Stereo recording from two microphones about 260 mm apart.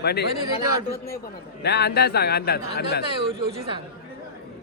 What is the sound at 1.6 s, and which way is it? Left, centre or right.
A man's voice, left.